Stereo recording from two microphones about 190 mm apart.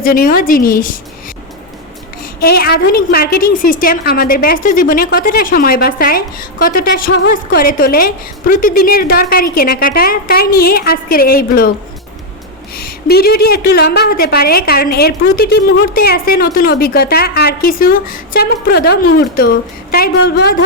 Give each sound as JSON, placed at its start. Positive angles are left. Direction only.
{"t": 0.0, "sound": "a woman's voice", "side_deg": 50}
{"t": 2.4, "sound": "a woman's voice", "side_deg": 55}
{"t": 12.7, "sound": "a woman's voice", "side_deg": 55}